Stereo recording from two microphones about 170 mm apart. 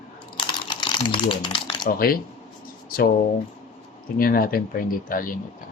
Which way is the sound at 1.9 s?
60° left (ahead or behind).